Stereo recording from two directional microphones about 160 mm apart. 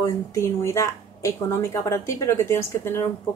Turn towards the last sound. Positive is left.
turn(degrees=15)  # may be behind; listen again after turning